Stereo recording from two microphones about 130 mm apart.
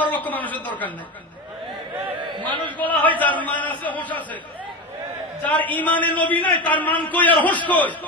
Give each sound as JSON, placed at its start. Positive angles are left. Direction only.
{"t": 0.0, "sound": "a woman's voice", "side_deg": 15}
{"t": 2.1, "sound": "a sound", "side_deg": -35}
{"t": 2.8, "sound": "a man's voice", "side_deg": 10}
{"t": 5.6, "sound": "a man's voice", "side_deg": 10}